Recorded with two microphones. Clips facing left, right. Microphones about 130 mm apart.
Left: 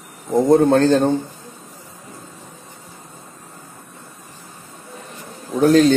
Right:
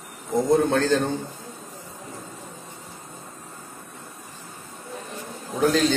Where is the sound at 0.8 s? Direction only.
25° left (ahead or behind).